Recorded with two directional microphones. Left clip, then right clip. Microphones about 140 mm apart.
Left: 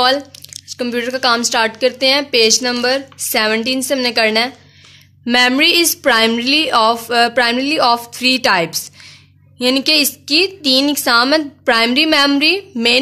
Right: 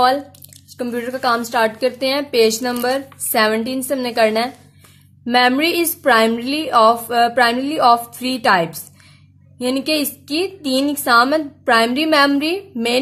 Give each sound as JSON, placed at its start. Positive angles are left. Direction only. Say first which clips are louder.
{"t": 0.7, "sound": "a woman's voice", "louder": "left 4 dB", "side_deg": 5}